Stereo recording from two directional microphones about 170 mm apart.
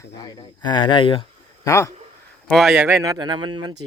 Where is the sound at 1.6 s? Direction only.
20° left (ahead or behind).